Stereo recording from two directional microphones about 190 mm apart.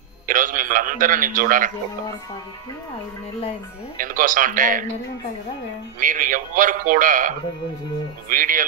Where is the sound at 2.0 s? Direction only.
20° left (ahead or behind).